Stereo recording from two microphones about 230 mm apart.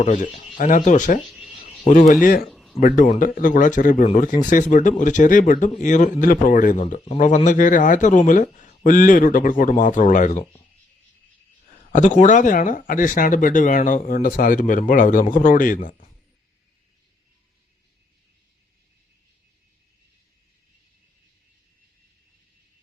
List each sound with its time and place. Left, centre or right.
0.0 s speech: left
1.2 s speech: centre
1.9 s speech: left
2.5 s a sound: centre
2.7 s speech: left
11.7 s speech: left